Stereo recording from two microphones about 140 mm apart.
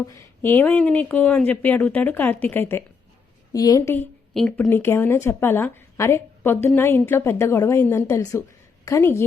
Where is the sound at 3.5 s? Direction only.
25° left (ahead or behind).